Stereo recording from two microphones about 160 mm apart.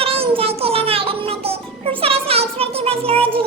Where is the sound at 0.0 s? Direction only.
35° right (ahead or behind).